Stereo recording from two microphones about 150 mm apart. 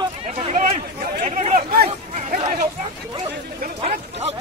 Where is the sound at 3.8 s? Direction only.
45° right (ahead or behind).